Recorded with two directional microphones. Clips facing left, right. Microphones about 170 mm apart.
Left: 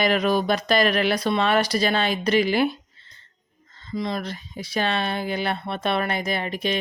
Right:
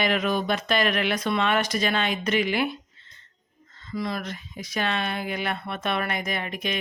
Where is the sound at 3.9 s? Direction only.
25° left (ahead or behind).